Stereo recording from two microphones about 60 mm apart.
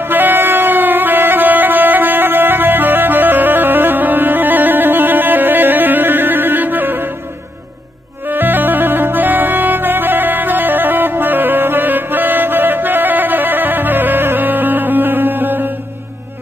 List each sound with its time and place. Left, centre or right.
0.1 s music: right
8.3 s music: right